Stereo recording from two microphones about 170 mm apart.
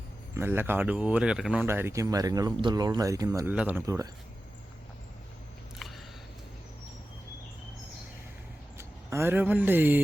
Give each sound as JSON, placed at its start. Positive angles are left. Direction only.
{"t": 0.3, "sound": "speech", "side_deg": -10}
{"t": 3.5, "sound": "speech", "side_deg": -10}
{"t": 8.8, "sound": "speech", "side_deg": -15}